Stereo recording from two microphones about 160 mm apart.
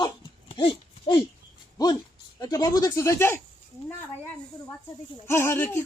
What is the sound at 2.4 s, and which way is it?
Speech, 25° left (ahead or behind).